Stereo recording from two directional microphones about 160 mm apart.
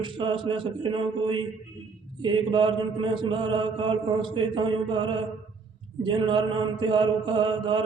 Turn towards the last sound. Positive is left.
turn(degrees=-30)  # may be behind; listen again after turning